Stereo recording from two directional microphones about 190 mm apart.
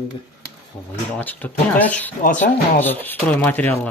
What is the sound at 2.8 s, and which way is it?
Speech, 10° left (ahead or behind).